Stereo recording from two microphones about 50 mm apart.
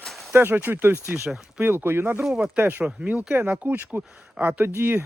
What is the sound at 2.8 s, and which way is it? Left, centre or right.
Speech, right.